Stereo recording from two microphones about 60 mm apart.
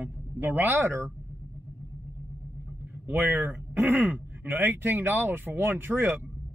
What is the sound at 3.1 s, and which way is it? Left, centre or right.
Speech, right.